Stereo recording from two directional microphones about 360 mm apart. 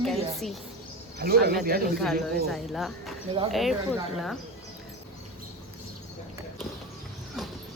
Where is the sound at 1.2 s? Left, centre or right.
Right.